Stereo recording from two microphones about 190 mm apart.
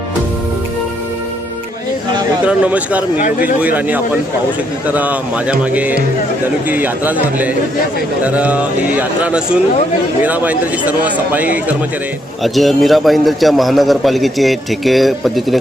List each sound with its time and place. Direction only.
2.4 s a man's voice: 5° right (ahead or behind)
3.2 s speech: 45° left (ahead or behind)
3.4 s a man's voice: 10° right (ahead or behind)